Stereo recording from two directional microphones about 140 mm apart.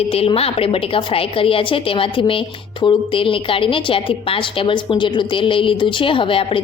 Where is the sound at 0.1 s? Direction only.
45° left (ahead or behind).